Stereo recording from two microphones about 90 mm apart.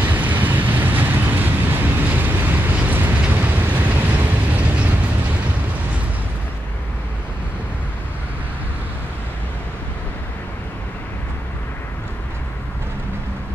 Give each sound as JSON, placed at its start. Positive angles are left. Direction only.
{"t": 0.0, "sound": "vehicle", "side_deg": -20}